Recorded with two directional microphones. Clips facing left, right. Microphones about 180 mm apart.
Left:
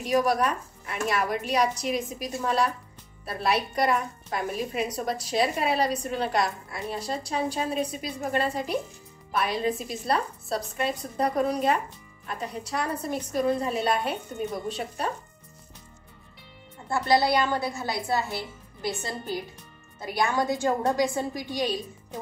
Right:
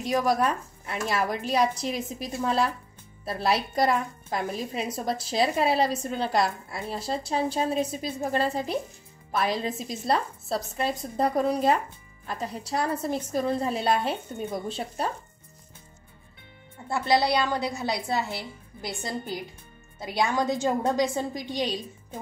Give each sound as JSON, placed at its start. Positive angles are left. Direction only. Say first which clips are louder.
{"t": 0.4, "sound": "a woman's voice", "louder": "right 1 dB", "side_deg": -30}
{"t": 16.9, "sound": "a woman's voice", "louder": "left 1 dB", "side_deg": -20}
{"t": 20.2, "sound": "a woman's voice", "louder": "even", "side_deg": -20}